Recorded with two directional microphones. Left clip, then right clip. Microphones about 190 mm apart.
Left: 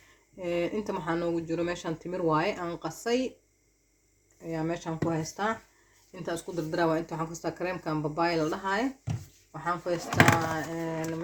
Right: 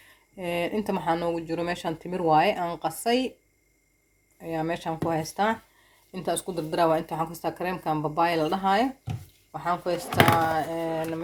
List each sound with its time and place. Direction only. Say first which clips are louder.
0.3 s speech: right 2 dB; 45° right (ahead or behind)
4.4 s speech: right 4 dB; 50° right (ahead or behind)